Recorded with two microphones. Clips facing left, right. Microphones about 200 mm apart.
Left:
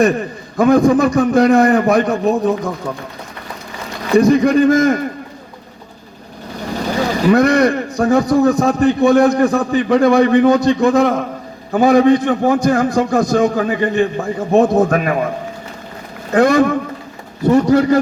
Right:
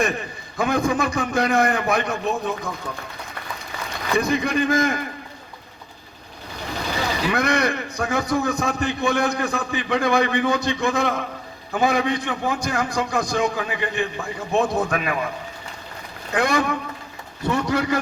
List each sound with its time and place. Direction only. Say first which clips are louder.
0.0 s a man's voice: left 10 dB; 40° left (ahead or behind)
4.1 s a man's voice: left 11 dB; 40° left (ahead or behind)
6.9 s a man's voice: left 11 dB; 45° left (ahead or behind)
16.3 s a man's voice: left 10 dB; 45° left (ahead or behind)